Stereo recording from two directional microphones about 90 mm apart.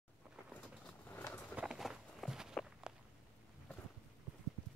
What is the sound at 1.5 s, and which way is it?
Horse, 15° right (ahead or behind).